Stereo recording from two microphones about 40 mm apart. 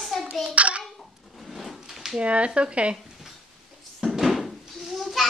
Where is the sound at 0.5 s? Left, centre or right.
Right.